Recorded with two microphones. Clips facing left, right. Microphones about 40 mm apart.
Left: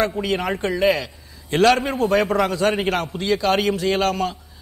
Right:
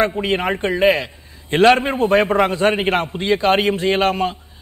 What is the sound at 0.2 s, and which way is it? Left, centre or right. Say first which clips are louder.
A man's voice: right 3 dB; right.